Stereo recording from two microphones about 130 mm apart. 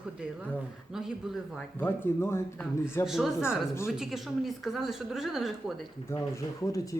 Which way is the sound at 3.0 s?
Centre (ahead or behind).